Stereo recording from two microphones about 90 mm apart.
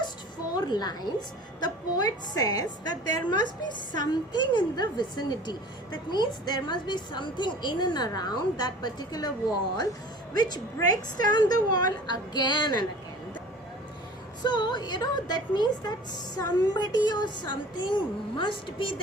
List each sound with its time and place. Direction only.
0.5 s a sound: 50° left (ahead or behind)
1.6 s a woman's voice: 50° left (ahead or behind)
10.3 s a woman's voice: 45° left (ahead or behind)
14.4 s a woman's voice: 55° left (ahead or behind)